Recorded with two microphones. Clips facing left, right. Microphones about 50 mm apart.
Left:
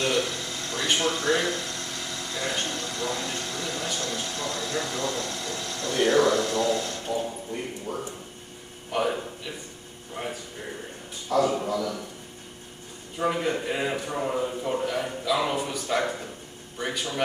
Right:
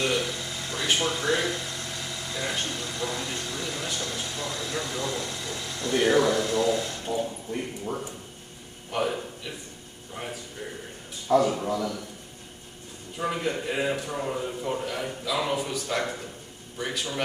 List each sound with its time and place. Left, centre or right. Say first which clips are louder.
0.0 s speech: left 1 dB; centre
7.9 s a man's voice: even; right
8.9 s a man's voice: left 2 dB; centre
11.3 s a man's voice: right 2 dB; right
11.6 s a man's voice: even; centre
13.2 s a man's voice: left 3 dB; centre